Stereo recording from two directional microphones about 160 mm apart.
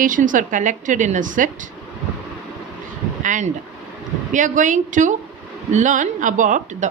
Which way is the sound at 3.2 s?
50° right (ahead or behind).